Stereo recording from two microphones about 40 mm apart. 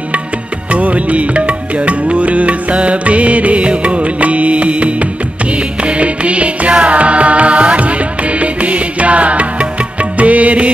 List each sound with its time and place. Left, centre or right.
0.7 s music: right